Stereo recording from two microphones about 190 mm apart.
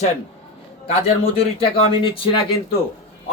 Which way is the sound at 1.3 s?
30° left (ahead or behind).